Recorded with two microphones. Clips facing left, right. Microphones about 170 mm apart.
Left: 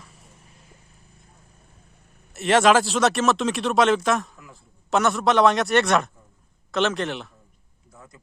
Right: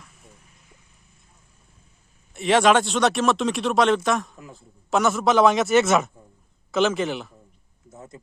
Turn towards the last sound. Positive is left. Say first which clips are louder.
# right 2 dB
turn(degrees=0)  # may be behind; listen again after turning